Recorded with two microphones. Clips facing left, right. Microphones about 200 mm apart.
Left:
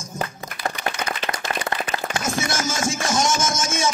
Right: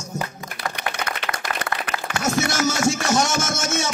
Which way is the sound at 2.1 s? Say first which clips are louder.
Right 5 dB; 65° right (ahead or behind).